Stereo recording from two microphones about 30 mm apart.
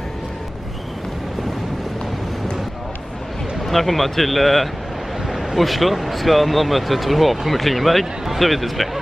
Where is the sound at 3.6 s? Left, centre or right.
Centre.